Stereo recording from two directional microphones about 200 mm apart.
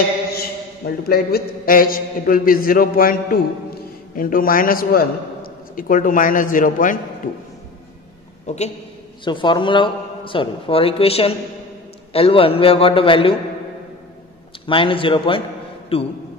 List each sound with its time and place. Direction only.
0.3 s a man's voice: 50° left (ahead or behind)
8.5 s a man's voice: 35° left (ahead or behind)
14.7 s a man's voice: 25° left (ahead or behind)